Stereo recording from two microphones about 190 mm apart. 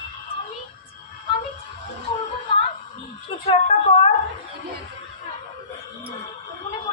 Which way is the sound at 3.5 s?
35° left (ahead or behind).